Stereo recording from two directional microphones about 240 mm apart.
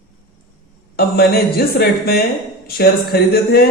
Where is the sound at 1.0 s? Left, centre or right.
Left.